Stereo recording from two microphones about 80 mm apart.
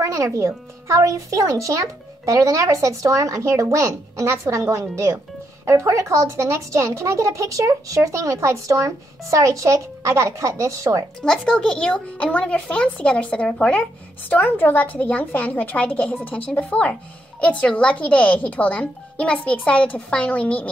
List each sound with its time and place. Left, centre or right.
0.0 s speech: right
11.2 s a woman's voice: centre